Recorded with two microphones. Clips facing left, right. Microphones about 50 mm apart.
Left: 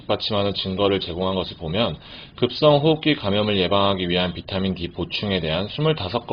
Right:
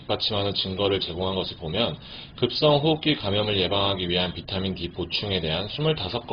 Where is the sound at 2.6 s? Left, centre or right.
Centre.